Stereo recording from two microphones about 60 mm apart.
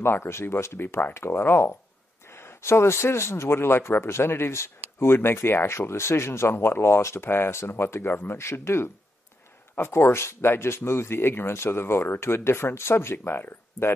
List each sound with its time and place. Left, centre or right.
0.0 s speech: left